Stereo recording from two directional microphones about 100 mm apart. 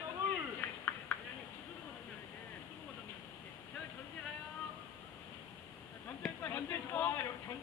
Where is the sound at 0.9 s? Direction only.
25° left (ahead or behind).